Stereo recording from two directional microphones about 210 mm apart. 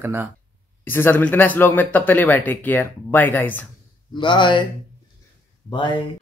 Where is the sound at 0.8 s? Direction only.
10° left (ahead or behind).